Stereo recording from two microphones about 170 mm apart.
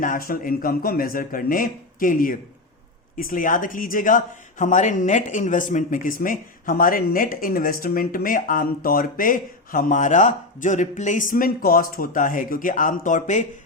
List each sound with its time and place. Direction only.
0.0 s speech: 55° left (ahead or behind)